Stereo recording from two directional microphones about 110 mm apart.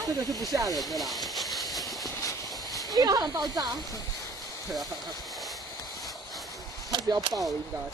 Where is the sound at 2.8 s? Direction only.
40° right (ahead or behind).